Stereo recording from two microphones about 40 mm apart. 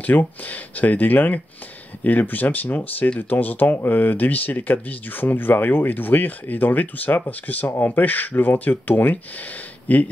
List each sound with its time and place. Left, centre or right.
0.0 s speech: left